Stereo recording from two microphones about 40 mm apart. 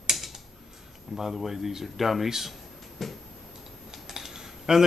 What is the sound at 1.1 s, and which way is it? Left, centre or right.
Speech, centre.